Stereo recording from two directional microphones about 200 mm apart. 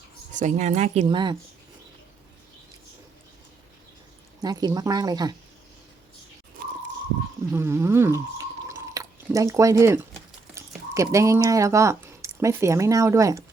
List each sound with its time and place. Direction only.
0.3 s speech: 35° right (ahead or behind)
1.0 s speech: 25° right (ahead or behind)
4.4 s speech: 20° right (ahead or behind)
7.5 s speech: 15° right (ahead or behind)